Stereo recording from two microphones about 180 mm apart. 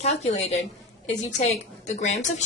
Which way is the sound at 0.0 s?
40° left (ahead or behind).